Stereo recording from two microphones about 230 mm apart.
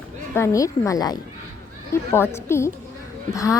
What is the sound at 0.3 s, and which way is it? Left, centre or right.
Speech, centre.